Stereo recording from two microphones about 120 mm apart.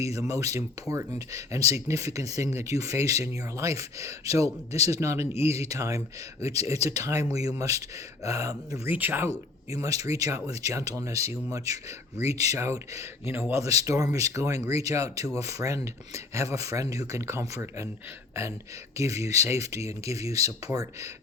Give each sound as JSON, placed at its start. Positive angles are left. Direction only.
{"t": 0.0, "sound": "speech", "side_deg": -25}
{"t": 8.9, "sound": "speech", "side_deg": -15}
{"t": 9.6, "sound": "speech", "side_deg": -30}